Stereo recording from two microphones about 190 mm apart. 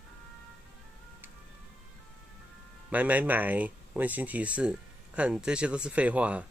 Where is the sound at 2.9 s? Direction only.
10° right (ahead or behind).